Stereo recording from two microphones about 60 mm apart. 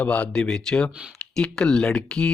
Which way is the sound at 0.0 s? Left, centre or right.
Left.